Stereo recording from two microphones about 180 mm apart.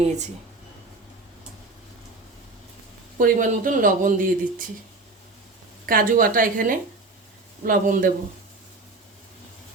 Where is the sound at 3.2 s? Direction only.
50° right (ahead or behind).